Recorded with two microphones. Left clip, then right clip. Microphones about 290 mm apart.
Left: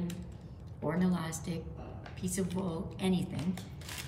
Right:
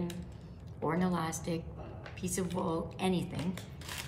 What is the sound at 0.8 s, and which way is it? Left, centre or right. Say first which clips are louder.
A woman's voice: right 2 dB; centre.